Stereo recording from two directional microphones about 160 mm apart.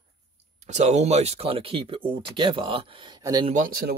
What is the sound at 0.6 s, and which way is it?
Speech, 45° right (ahead or behind).